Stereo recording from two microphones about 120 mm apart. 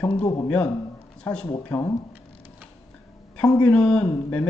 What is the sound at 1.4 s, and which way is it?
Speech, 25° left (ahead or behind).